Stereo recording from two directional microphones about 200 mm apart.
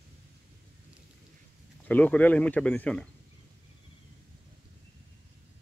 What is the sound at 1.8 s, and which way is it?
Speech, 10° left (ahead or behind).